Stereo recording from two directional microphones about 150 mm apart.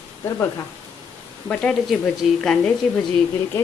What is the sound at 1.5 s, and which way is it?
Speech, 5° left (ahead or behind).